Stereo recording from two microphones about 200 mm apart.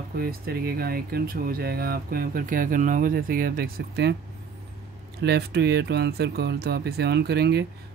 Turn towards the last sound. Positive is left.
turn(degrees=-55)  # may be behind; listen again after turning